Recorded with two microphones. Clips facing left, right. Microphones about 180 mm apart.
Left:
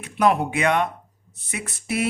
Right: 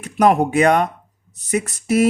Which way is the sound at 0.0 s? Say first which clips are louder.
Right 5 dB; 45° right (ahead or behind).